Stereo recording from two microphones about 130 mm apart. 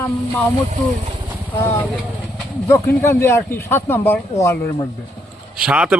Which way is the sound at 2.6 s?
20° left (ahead or behind).